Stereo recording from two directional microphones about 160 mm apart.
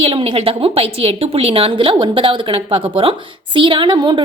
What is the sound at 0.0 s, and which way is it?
A woman's voice, 35° right (ahead or behind).